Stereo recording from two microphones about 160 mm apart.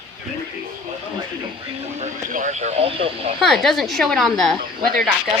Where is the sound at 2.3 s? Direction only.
50° right (ahead or behind); by 3.3 s 35° right (ahead or behind).